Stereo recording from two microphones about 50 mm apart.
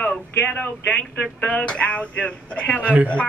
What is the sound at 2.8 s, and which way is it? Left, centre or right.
Speech, right.